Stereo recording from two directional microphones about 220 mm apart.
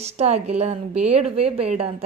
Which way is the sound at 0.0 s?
30° right (ahead or behind).